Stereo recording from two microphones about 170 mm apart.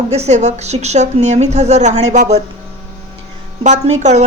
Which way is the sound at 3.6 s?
45° right (ahead or behind).